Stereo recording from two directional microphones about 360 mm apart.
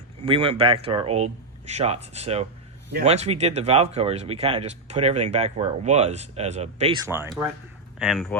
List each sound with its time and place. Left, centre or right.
0.2 s speech: centre